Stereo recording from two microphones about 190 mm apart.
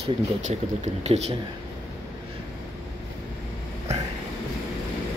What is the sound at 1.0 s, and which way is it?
Speech, 35° right (ahead or behind).